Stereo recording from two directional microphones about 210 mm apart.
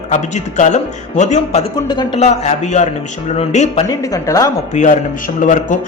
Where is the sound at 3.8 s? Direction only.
15° left (ahead or behind).